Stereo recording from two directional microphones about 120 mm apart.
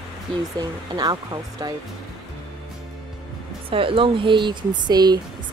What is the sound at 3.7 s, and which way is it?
Speech, 50° right (ahead or behind).